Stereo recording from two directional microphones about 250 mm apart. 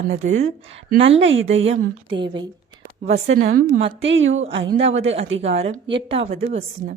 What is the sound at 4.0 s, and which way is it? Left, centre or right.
Speech, right.